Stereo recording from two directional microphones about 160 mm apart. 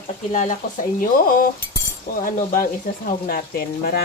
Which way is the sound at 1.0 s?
60° left (ahead or behind).